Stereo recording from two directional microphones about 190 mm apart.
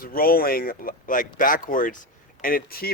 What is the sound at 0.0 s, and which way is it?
A man's voice, 50° left (ahead or behind).